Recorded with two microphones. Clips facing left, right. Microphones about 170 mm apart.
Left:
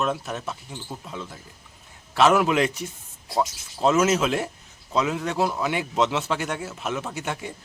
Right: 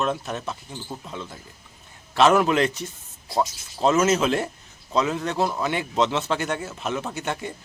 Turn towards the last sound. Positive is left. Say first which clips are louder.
# right 2 dB
turn(degrees=5)  # may be behind; listen again after turning